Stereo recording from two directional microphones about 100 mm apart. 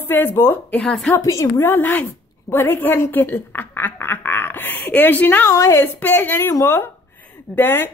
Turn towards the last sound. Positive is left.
turn(degrees=20)  # may be behind; listen again after turning